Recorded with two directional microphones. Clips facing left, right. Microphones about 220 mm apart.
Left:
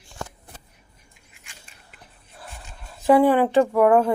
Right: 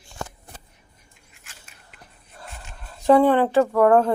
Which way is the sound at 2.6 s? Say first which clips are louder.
Right 1 dB; 15° left (ahead or behind).